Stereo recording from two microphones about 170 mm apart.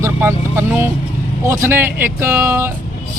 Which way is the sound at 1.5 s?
15° right (ahead or behind).